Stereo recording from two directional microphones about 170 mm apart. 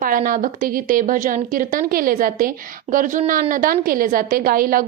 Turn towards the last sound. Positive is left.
turn(degrees=-55)  # may be behind; listen again after turning